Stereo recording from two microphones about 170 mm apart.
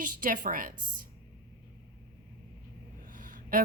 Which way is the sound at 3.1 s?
55° right (ahead or behind).